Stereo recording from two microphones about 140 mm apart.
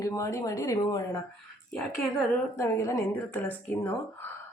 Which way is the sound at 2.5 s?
20° left (ahead or behind).